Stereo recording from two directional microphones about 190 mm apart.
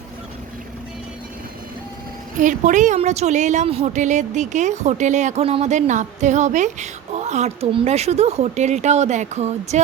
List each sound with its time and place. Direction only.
2.4 s a woman's voice: 40° right (ahead or behind)